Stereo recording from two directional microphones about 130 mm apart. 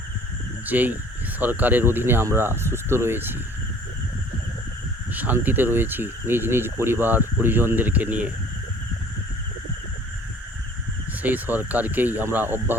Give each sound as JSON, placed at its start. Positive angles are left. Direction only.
{"t": 0.7, "sound": "speech", "side_deg": -15}
{"t": 5.1, "sound": "speech", "side_deg": -15}
{"t": 11.2, "sound": "speech", "side_deg": -15}